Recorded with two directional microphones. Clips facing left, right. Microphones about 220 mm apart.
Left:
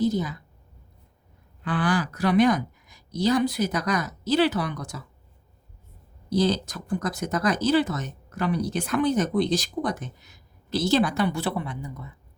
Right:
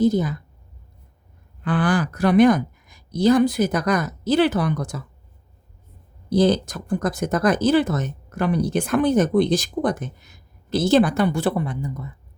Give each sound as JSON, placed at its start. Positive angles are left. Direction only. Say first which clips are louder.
{"t": 0.0, "sound": "speech", "louder": "right 5 dB", "side_deg": -50}
{"t": 1.6, "sound": "speech", "louder": "right 4 dB", "side_deg": -50}
{"t": 6.3, "sound": "speech", "louder": "right 5 dB", "side_deg": -50}